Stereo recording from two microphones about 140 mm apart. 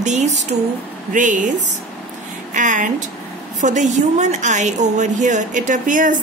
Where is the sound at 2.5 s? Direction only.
65° right (ahead or behind).